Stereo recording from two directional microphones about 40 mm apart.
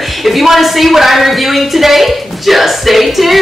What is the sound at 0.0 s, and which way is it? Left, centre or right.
A woman's voice, centre.